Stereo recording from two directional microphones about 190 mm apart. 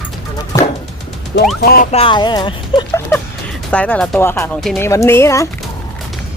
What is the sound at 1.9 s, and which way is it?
Speech, 30° left (ahead or behind).